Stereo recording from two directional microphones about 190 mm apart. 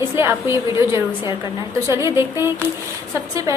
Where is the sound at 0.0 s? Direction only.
15° right (ahead or behind).